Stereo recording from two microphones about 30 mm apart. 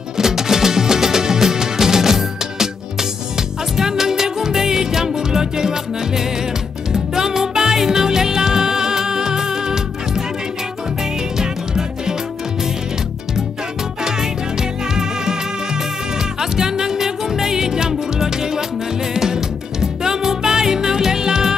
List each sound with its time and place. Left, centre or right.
0.2 s music: centre
11.3 s music: centre
14.0 s music: right
16.3 s music: centre